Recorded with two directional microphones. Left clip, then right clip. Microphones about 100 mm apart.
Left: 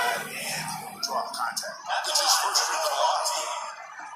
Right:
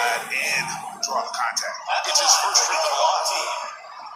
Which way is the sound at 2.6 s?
45° right (ahead or behind).